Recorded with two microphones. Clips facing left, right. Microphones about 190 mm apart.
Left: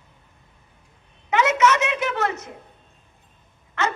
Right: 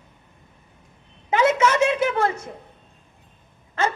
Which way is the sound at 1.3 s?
30° right (ahead or behind).